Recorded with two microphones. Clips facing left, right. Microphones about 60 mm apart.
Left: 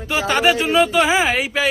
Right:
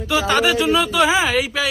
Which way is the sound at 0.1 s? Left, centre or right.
Left.